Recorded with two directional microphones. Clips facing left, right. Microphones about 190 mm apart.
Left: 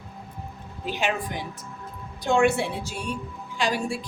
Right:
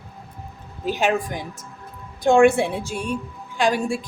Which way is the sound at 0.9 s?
45° right (ahead or behind).